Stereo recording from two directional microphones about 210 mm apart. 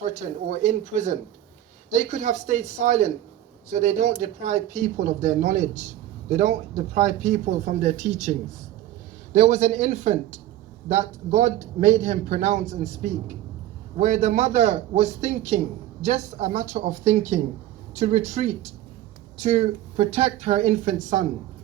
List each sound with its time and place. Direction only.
0.0 s a man's voice: 35° right (ahead or behind)